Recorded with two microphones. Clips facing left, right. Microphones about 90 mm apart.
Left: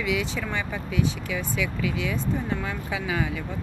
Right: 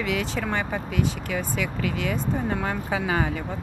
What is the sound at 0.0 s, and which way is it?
Speech, 45° right (ahead or behind).